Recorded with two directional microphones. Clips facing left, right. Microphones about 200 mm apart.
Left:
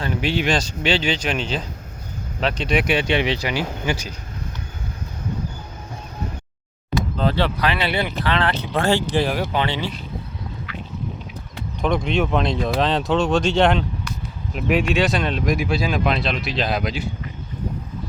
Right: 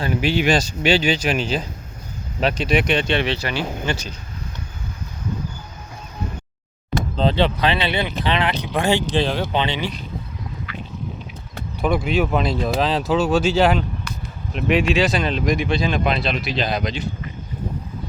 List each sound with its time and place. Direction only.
0.0 s speech: 5° right (ahead or behind); by 4.1 s 10° left (ahead or behind)
7.2 s speech: 20° right (ahead or behind)
9.1 s speech: 5° left (ahead or behind)
9.5 s speech: 20° right (ahead or behind)
11.8 s speech: 5° right (ahead or behind)